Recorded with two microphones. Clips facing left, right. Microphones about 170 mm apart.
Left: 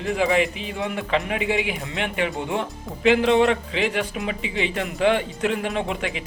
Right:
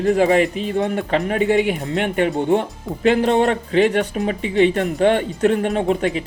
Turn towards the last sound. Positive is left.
turn(degrees=-40)  # may be behind; listen again after turning